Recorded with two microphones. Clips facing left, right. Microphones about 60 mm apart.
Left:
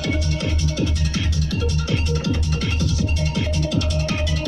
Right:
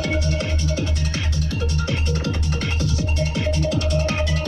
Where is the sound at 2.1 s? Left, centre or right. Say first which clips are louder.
Left 2 dB; right.